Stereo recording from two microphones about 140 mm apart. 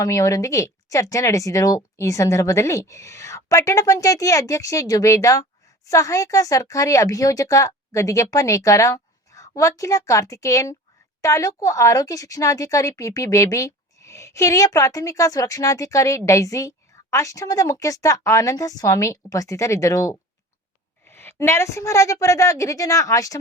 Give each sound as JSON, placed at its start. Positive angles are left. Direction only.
{"t": 0.0, "sound": "speech", "side_deg": 25}